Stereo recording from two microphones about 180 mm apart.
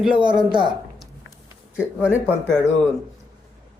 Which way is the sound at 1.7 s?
5° right (ahead or behind).